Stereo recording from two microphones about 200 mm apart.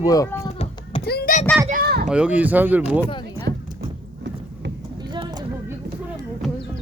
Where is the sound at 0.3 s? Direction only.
30° left (ahead or behind).